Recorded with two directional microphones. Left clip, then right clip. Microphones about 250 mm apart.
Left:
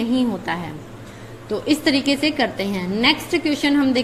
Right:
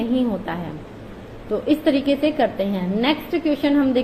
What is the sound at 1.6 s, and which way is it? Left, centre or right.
A woman's voice, left.